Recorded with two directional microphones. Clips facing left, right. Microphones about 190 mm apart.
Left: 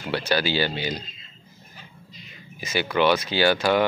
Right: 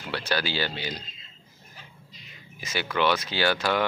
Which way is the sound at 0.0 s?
5° left (ahead or behind).